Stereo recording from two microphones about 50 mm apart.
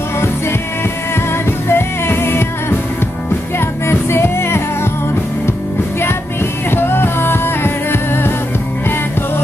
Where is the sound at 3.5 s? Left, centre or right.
Left.